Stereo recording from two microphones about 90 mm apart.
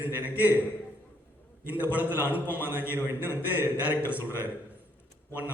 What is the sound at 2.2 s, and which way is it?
A man's voice, 20° right (ahead or behind).